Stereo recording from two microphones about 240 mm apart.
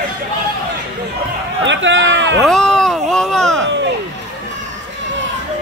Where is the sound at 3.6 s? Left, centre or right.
Right.